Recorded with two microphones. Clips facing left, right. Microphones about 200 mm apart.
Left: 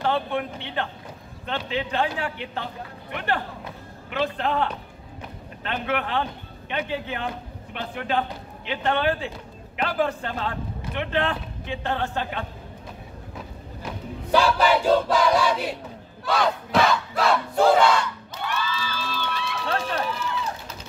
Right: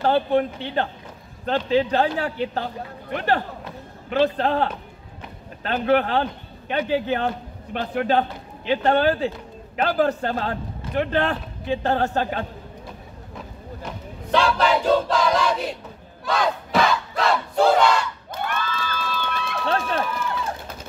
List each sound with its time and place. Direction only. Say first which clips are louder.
0.0 s a man's voice: right 6 dB; 40° right (ahead or behind)
13.8 s choir: left 3 dB; 5° left (ahead or behind)
16.3 s battle cry: even; centre (ahead or behind)
18.3 s crowd: right 2 dB; 50° right (ahead or behind)